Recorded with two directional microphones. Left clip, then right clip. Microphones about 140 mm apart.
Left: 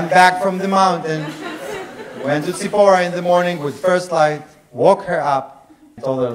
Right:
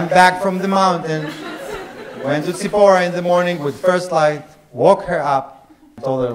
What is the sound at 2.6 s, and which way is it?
A man's voice, 50° left (ahead or behind).